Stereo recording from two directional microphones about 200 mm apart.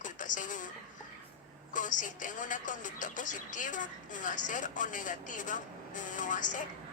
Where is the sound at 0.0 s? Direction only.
40° left (ahead or behind).